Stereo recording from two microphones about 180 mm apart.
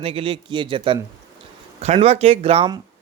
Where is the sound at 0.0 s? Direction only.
30° right (ahead or behind).